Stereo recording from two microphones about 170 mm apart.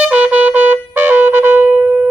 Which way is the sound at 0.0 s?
10° right (ahead or behind).